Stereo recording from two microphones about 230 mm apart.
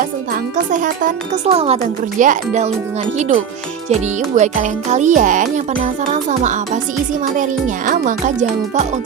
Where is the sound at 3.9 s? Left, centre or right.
Right.